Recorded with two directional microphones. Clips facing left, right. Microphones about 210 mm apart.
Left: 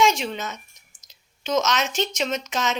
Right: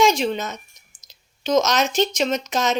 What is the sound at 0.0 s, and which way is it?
A woman's voice, 35° right (ahead or behind).